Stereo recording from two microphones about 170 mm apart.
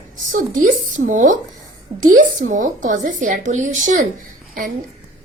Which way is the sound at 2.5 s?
50° right (ahead or behind).